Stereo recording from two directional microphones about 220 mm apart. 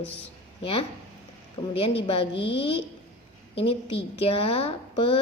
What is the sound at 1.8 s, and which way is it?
Speech, 25° left (ahead or behind).